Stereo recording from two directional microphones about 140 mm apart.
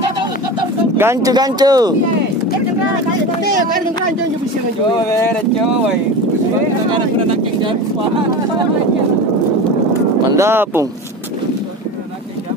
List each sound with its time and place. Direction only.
0.9 s speech: 15° right (ahead or behind)
1.3 s speech: 30° right (ahead or behind)
10.2 s speech: 20° right (ahead or behind)